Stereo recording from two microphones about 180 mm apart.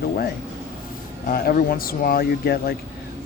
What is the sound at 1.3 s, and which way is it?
Speech, 55° left (ahead or behind).